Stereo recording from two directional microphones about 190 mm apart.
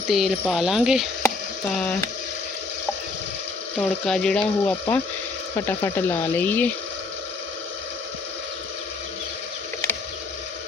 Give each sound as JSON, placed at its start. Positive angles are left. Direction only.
{"t": 0.1, "sound": "speech", "side_deg": 0}
{"t": 3.8, "sound": "speech", "side_deg": 5}